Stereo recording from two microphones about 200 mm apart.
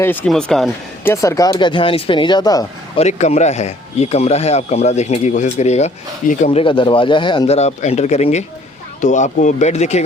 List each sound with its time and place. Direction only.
0.0 s speech: 10° left (ahead or behind)
1.1 s speech: 15° left (ahead or behind)
3.0 s speech: 35° left (ahead or behind)